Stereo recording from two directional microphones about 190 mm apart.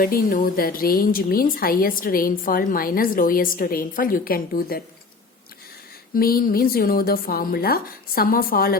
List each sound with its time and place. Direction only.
0.0 s speech: 45° left (ahead or behind)
6.1 s speech: 50° left (ahead or behind)